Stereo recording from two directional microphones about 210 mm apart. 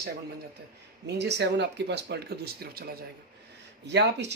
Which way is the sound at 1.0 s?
55° right (ahead or behind).